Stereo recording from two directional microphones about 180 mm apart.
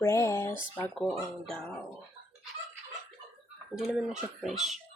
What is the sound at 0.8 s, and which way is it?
Speech, centre (ahead or behind).